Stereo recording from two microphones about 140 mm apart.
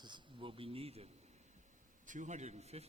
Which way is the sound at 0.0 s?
35° right (ahead or behind).